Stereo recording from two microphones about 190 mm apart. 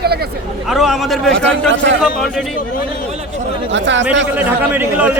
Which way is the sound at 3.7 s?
70° right (ahead or behind).